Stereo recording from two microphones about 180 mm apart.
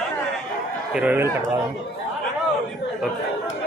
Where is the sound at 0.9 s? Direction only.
10° right (ahead or behind).